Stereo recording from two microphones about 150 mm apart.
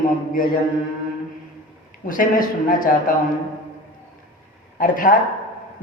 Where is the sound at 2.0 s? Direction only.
65° left (ahead or behind).